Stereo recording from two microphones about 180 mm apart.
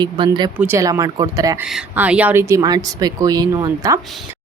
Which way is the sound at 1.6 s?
5° right (ahead or behind).